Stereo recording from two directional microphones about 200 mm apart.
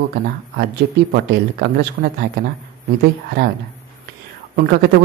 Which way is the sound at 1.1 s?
55° right (ahead or behind).